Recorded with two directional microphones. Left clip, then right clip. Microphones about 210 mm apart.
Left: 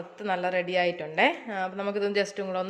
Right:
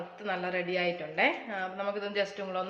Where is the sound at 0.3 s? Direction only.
50° left (ahead or behind).